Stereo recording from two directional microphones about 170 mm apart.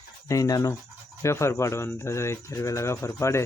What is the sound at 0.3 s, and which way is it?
Speech, 20° left (ahead or behind).